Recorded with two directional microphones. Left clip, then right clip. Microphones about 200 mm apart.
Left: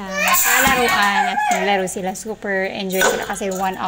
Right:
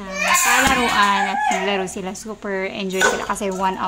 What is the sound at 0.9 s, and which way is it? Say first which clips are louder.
Speech: left 1 dB; centre (ahead or behind).